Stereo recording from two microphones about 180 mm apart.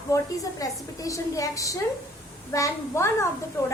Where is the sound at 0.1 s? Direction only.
20° left (ahead or behind).